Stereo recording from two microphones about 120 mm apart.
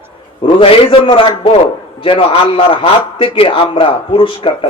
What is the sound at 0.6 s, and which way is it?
A man's voice, 45° left (ahead or behind).